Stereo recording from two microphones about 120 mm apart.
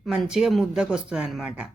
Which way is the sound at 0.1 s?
5° right (ahead or behind).